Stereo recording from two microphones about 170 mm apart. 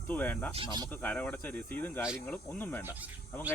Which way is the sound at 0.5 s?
30° right (ahead or behind).